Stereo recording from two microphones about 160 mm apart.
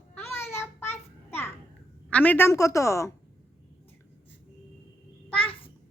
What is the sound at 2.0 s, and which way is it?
Speech, 10° left (ahead or behind).